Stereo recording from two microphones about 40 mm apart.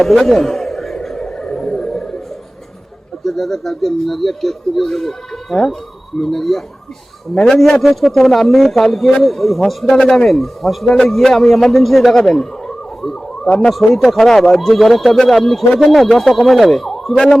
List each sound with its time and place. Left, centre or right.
0.0 s a sound: centre
1.2 s a sound: centre
3.2 s speech: centre
7.3 s a man's voice: centre
7.6 s speech: centre
9.9 s a man's voice: centre
10.2 s speech: centre; by 13.7 s left
13.7 s speech: centre